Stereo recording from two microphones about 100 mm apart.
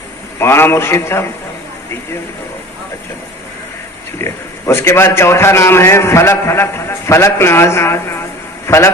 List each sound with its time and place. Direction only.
0.3 s a man's voice: 25° left (ahead or behind)
4.2 s a man's voice: 25° left (ahead or behind)